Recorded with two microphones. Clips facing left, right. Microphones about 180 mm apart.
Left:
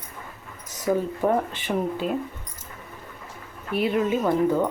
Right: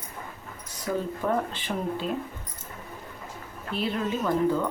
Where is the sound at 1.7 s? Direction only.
10° left (ahead or behind).